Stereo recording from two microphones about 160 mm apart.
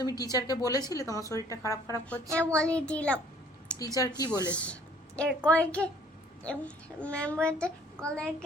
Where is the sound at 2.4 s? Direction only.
5° left (ahead or behind).